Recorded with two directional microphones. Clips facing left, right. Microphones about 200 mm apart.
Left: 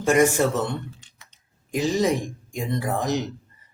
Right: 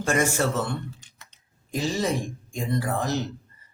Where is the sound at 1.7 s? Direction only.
15° left (ahead or behind).